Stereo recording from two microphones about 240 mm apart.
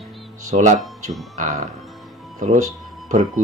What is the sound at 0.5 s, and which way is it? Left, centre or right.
Speech, right.